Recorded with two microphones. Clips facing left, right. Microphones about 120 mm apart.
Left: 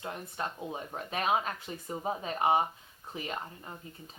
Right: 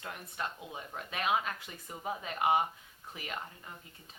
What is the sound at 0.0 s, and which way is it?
Speech, 30° left (ahead or behind).